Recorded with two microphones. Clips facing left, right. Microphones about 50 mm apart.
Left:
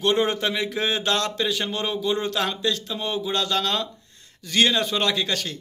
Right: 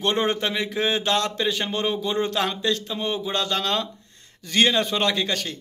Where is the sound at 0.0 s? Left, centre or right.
Centre.